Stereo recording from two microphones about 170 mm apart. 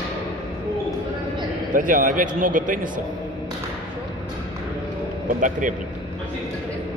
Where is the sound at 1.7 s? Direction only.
50° right (ahead or behind).